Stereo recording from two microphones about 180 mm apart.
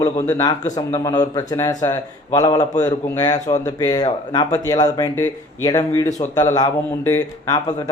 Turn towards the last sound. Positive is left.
turn(degrees=20)  # may be behind; listen again after turning